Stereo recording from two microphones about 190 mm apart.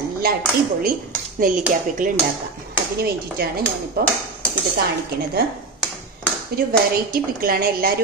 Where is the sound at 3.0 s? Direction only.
55° right (ahead or behind).